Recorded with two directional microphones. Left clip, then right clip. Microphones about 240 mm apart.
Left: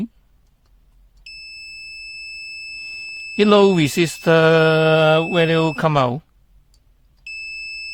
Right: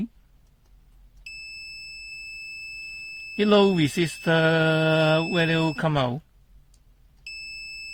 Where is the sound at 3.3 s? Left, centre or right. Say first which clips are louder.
Left 6 dB; left.